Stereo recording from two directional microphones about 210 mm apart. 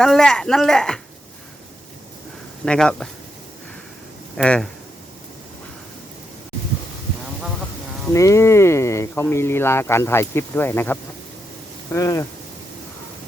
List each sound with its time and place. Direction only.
0.0 s a woman's voice: centre (ahead or behind)
2.6 s a woman's voice: 5° left (ahead or behind)
4.4 s a woman's voice: 5° left (ahead or behind)
8.1 s speech: 15° left (ahead or behind)